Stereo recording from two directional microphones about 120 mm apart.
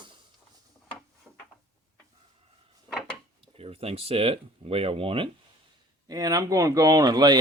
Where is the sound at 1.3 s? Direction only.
10° right (ahead or behind).